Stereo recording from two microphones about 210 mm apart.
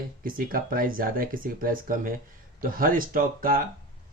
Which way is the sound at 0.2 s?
40° right (ahead or behind).